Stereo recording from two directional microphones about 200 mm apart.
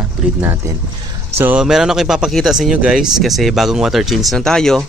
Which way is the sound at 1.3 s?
10° right (ahead or behind).